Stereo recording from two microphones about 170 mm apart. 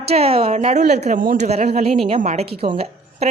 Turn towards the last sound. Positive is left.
turn(degrees=-35)  # may be behind; listen again after turning